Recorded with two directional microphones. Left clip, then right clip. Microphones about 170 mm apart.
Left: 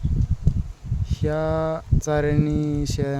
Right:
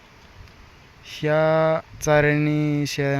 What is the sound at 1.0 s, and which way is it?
Speech, 10° left (ahead or behind).